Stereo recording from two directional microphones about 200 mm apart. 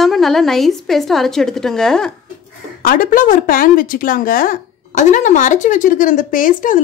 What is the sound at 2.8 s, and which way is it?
A woman's voice, 45° left (ahead or behind).